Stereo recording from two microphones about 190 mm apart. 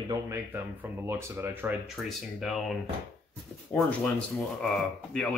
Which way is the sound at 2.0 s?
Centre (ahead or behind).